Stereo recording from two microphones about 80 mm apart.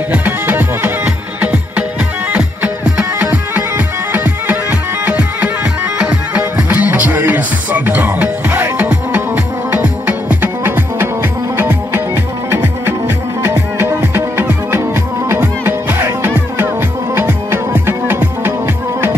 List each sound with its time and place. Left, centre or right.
0.1 s music: right
13.7 s music: right